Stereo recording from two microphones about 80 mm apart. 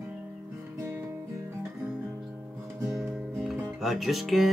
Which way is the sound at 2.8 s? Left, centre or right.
Centre.